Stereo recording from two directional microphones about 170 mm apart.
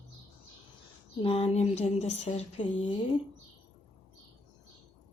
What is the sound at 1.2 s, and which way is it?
Speech, 35° left (ahead or behind).